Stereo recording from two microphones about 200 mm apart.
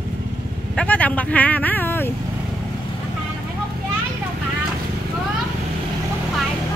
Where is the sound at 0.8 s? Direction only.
5° left (ahead or behind).